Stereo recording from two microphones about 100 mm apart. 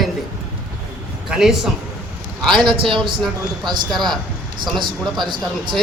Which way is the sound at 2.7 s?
55° right (ahead or behind).